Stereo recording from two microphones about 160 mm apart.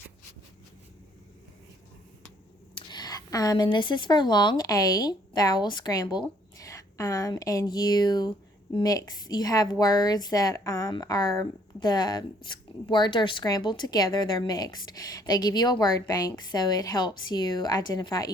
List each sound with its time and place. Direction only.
2.7 s a woman's voice: 25° left (ahead or behind)